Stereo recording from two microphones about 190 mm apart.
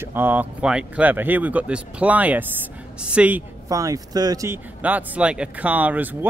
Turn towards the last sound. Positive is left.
turn(degrees=-10)  # may be behind; listen again after turning